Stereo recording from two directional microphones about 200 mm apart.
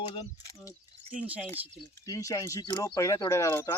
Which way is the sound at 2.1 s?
15° left (ahead or behind).